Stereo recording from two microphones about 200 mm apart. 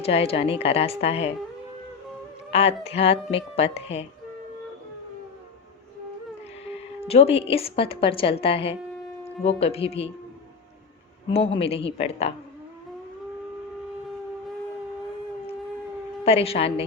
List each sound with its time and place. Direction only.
0.0 s a woman's voice: 30° left (ahead or behind)
2.5 s speech: 30° left (ahead or behind)
7.1 s a woman's voice: 30° left (ahead or behind)
11.3 s a woman's voice: 25° left (ahead or behind)
16.2 s a woman's voice: 30° left (ahead or behind)